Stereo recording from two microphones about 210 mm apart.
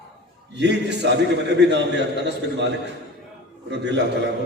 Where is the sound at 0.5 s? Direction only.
55° right (ahead or behind).